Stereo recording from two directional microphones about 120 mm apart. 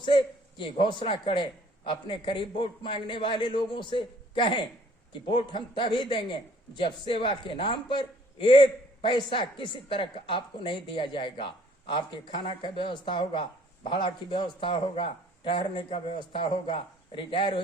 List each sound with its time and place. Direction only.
0.0 s a man's voice: 40° left (ahead or behind)